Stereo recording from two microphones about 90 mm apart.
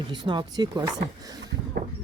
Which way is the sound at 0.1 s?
55° right (ahead or behind).